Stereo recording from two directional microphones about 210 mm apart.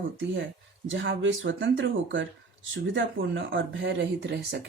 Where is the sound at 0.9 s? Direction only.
60° right (ahead or behind).